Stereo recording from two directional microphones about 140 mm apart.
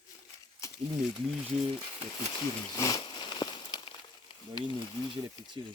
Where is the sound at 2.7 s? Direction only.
25° left (ahead or behind).